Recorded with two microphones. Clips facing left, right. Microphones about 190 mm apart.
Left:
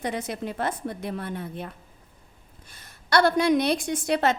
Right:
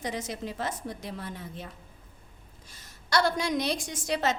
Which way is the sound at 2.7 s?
60° left (ahead or behind).